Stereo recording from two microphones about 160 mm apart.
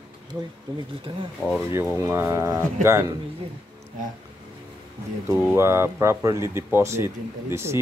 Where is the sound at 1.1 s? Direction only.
35° right (ahead or behind).